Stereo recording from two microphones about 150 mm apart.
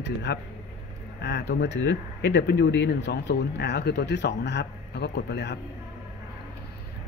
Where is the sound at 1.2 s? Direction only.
90° left.